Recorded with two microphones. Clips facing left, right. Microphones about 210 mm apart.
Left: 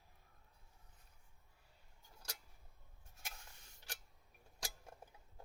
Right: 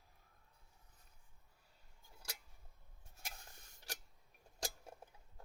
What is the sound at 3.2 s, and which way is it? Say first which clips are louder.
Rub: right 1 dB; 40° right (ahead or behind).